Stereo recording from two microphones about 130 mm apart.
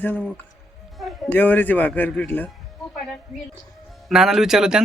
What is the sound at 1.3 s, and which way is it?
A man's voice, 15° left (ahead or behind).